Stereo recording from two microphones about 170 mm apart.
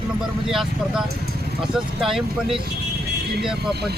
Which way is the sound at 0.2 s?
Centre (ahead or behind).